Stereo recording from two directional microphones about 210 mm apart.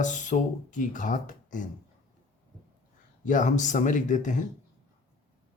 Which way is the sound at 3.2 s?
35° left (ahead or behind).